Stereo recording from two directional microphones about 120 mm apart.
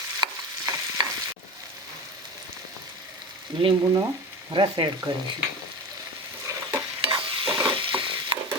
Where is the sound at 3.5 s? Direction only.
40° right (ahead or behind).